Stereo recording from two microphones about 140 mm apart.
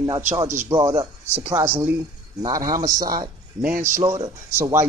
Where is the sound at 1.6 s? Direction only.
15° right (ahead or behind).